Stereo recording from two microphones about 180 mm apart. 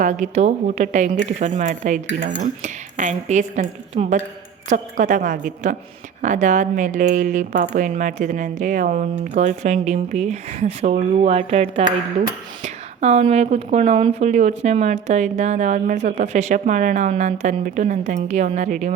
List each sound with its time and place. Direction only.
0.0 s a woman's voice: 40° right (ahead or behind)